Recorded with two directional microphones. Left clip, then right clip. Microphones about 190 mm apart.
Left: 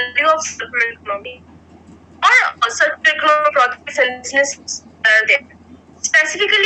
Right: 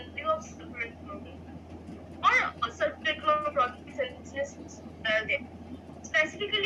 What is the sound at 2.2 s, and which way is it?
Speech, 50° left (ahead or behind).